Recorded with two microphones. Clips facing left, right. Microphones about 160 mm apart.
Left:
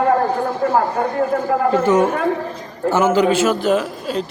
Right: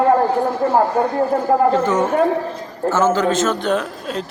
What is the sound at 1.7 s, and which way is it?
A man's voice, 10° left (ahead or behind).